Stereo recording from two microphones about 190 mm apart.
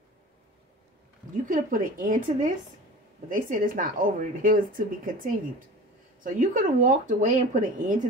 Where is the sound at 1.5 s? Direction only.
45° right (ahead or behind).